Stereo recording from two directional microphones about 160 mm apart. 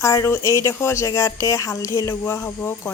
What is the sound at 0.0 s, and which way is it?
Speech, 20° left (ahead or behind).